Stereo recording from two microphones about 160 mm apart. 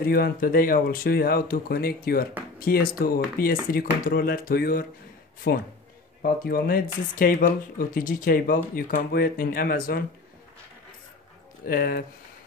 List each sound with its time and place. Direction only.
0.0 s speech: 70° left (ahead or behind)
5.5 s speech: 80° left
6.2 s speech: 70° left (ahead or behind)
11.6 s speech: 65° left (ahead or behind)